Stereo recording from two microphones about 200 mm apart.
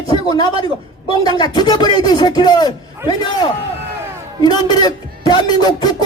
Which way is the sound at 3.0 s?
10° right (ahead or behind).